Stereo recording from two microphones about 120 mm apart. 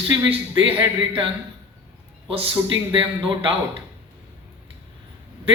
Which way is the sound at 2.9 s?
45° right (ahead or behind).